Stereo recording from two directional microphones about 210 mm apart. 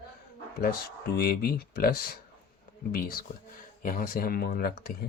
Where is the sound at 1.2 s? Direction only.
45° left (ahead or behind).